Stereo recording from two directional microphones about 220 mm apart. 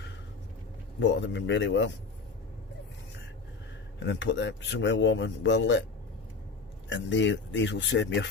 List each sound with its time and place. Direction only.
0.9 s speech: 55° left (ahead or behind)
4.0 s speech: 55° left (ahead or behind)
6.8 s speech: 55° left (ahead or behind)